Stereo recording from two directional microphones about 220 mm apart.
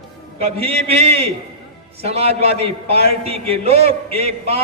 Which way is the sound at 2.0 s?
30° right (ahead or behind).